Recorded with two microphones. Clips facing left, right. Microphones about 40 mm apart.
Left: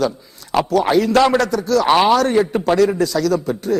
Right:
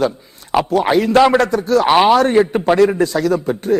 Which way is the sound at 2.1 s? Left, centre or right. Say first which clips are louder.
Right 3 dB; right.